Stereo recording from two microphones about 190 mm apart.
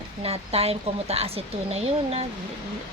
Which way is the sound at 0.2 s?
30° right (ahead or behind).